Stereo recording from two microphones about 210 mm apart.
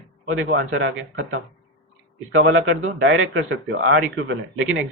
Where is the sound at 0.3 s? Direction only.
75° right (ahead or behind).